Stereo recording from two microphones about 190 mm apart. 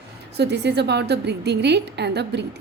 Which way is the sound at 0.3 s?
60° right (ahead or behind).